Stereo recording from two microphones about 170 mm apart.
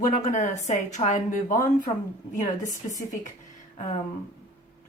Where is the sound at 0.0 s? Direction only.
45° left (ahead or behind).